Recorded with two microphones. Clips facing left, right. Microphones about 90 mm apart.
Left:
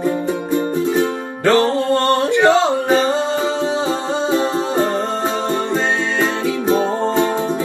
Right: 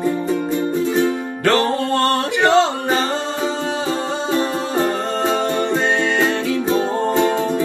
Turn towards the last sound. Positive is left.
turn(degrees=20)  # may be behind; listen again after turning